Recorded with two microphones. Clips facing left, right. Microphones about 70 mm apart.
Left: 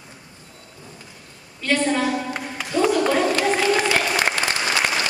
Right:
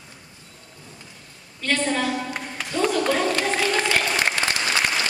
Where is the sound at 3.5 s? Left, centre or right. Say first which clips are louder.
Left 3 dB; centre.